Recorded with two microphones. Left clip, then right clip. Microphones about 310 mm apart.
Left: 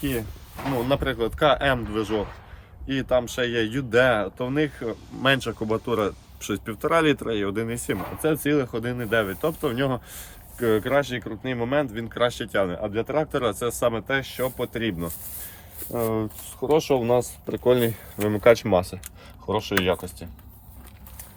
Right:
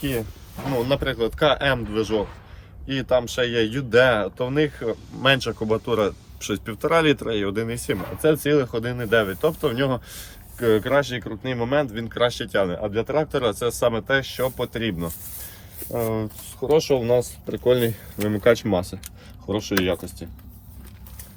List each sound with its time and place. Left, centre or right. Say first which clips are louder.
0.0 s speech: right 2 dB; centre